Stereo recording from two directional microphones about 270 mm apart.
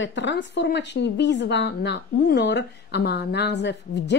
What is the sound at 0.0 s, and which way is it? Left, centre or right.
A woman's voice, left.